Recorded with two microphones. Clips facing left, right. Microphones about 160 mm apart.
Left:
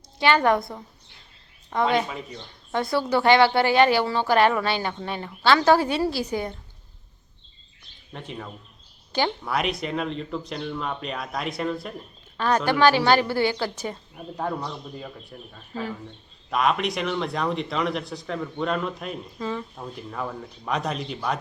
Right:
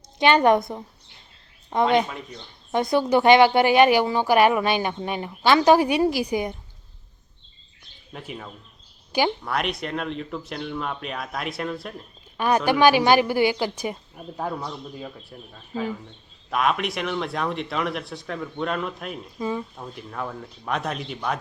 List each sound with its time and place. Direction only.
0.2 s a woman's voice: 20° right (ahead or behind)
2.0 s speech: 5° left (ahead or behind)
2.7 s speech: 20° right (ahead or behind)
8.1 s speech: 5° right (ahead or behind)
12.4 s speech: 15° right (ahead or behind)
16.5 s speech: centre (ahead or behind)
19.4 s speech: 15° right (ahead or behind)
19.7 s speech: centre (ahead or behind)